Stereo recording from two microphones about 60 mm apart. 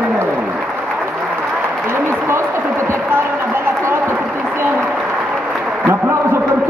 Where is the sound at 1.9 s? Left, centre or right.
Right.